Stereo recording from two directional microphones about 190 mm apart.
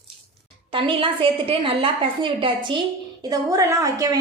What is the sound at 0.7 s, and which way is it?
A woman's voice, 25° right (ahead or behind).